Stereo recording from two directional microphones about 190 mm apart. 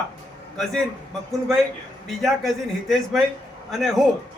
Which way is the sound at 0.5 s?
Centre (ahead or behind).